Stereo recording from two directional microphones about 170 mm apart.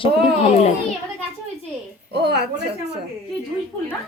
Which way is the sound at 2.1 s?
80° right.